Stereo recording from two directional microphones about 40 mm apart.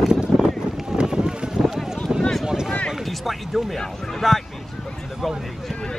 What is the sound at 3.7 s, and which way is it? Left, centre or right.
Speech, centre.